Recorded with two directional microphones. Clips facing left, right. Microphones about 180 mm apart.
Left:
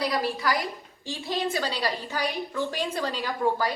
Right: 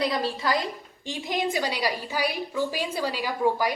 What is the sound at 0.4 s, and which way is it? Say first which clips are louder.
A woman's voice: right 1 dB; 20° right (ahead or behind).